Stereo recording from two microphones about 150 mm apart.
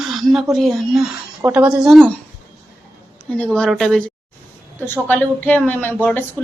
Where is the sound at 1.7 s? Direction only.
Centre (ahead or behind).